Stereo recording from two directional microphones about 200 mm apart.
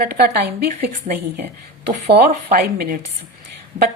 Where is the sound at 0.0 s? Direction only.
50° right (ahead or behind).